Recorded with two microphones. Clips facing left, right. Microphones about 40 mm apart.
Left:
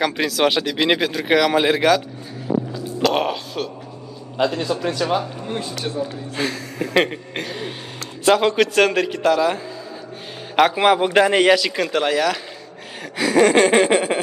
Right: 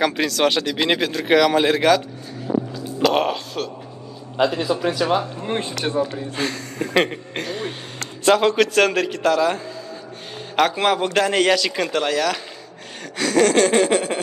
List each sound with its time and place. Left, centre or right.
0.0 s speech: centre
5.4 s music: right
6.3 s a man's voice: centre